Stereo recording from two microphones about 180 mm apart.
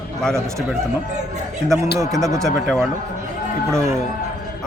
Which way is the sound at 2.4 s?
Centre (ahead or behind).